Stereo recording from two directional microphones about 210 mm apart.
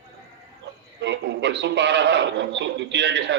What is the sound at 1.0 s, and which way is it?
A man's voice, 55° right (ahead or behind).